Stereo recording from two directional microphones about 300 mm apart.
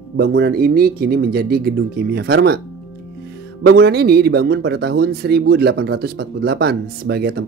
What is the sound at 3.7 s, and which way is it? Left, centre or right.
Speech, right.